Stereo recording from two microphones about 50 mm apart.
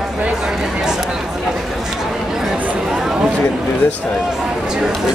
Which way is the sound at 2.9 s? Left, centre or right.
Centre.